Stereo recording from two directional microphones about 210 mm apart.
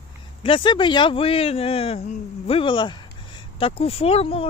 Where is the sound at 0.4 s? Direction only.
25° left (ahead or behind).